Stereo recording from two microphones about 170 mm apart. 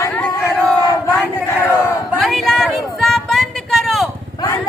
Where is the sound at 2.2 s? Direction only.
Centre (ahead or behind).